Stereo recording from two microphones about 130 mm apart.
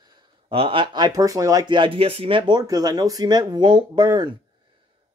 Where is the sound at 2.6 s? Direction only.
30° right (ahead or behind).